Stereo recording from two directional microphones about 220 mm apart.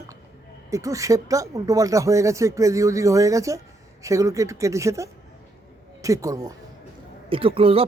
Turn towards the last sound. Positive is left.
turn(degrees=-25)  # may be behind; listen again after turning